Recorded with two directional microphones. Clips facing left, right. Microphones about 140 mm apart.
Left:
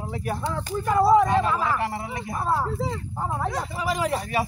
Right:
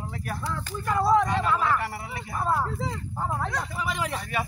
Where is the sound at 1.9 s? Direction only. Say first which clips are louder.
Left 5 dB; 25° left (ahead or behind).